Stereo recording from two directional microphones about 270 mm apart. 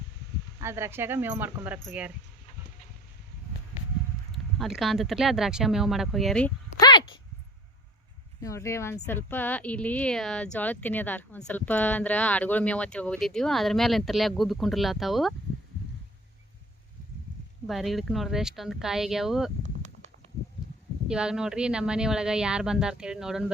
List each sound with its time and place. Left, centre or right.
0.6 s speech: centre
4.3 s speech: centre
6.7 s a sound: centre
8.4 s speech: centre
17.7 s speech: centre
21.1 s speech: centre